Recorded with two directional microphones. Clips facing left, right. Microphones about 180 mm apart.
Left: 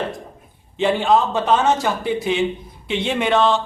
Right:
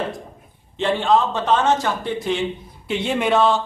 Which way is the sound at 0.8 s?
5° left (ahead or behind).